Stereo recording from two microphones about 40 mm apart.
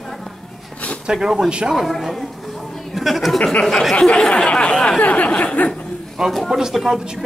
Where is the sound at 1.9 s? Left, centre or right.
Centre.